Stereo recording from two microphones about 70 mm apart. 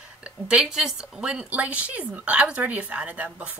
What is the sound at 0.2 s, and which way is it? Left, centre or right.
Speech, centre.